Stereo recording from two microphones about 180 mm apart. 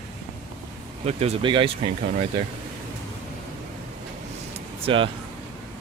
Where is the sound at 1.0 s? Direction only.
35° right (ahead or behind).